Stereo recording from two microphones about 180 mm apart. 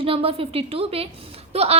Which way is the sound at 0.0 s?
30° right (ahead or behind).